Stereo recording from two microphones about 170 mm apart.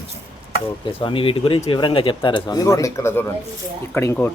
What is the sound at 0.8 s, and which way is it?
Speech, 30° left (ahead or behind).